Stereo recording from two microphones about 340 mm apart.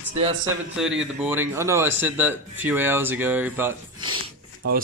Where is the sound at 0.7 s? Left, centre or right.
Centre.